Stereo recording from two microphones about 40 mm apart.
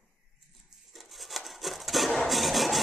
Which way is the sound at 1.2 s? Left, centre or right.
Centre.